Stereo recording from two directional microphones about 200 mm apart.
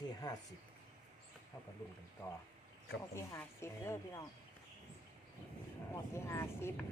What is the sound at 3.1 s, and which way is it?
Speech, 15° left (ahead or behind).